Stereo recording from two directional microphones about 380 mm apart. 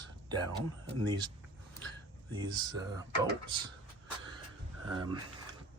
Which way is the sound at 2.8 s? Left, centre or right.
Centre.